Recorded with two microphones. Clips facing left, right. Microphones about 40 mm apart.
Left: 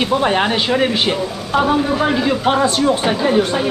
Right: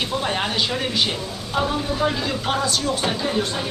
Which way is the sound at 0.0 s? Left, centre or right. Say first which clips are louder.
Left 8 dB; left.